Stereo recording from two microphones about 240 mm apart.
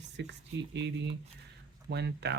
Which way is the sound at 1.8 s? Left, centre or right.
Right.